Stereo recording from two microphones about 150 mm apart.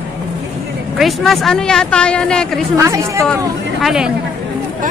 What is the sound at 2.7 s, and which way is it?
Speech, 20° right (ahead or behind).